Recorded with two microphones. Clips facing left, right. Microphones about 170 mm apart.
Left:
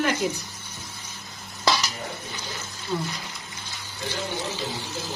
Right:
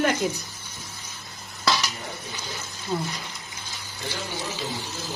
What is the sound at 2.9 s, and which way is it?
Speech, 40° right (ahead or behind).